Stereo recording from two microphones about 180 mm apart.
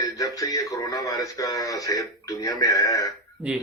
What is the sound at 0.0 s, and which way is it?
Speech, 20° left (ahead or behind).